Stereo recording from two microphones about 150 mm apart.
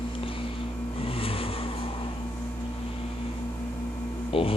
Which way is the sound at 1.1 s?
40° left (ahead or behind).